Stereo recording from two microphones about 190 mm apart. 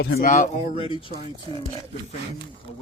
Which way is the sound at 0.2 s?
40° left (ahead or behind).